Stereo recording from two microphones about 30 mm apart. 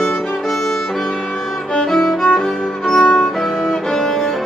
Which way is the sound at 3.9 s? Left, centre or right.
Centre.